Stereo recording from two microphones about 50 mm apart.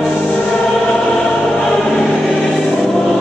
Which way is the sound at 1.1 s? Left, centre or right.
Centre.